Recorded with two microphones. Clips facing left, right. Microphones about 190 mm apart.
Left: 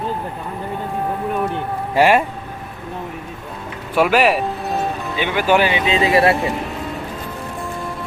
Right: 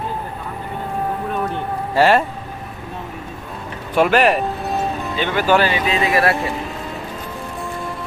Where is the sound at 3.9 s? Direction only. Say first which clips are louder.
Even; 5° left (ahead or behind).